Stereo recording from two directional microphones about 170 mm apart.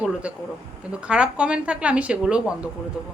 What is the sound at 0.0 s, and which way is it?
A woman's voice, 5° right (ahead or behind).